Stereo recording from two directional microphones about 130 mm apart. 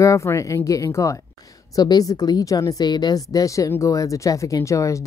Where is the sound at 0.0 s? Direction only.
20° left (ahead or behind).